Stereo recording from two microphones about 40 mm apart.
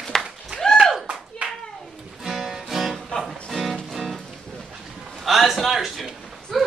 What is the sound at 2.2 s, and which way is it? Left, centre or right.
Music, centre.